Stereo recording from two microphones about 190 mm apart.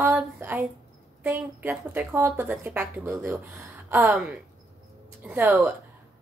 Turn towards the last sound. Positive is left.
turn(degrees=-5)  # may be behind; listen again after turning